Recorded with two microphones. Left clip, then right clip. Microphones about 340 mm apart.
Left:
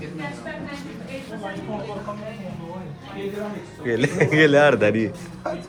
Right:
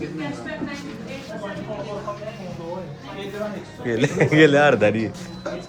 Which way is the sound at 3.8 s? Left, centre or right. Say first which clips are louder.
Even; centre.